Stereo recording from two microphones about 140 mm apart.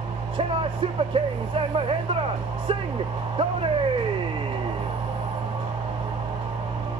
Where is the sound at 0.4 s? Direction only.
40° right (ahead or behind).